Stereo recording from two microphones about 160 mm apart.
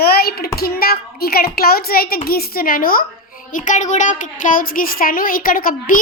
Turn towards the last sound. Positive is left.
turn(degrees=60)  # may be behind; listen again after turning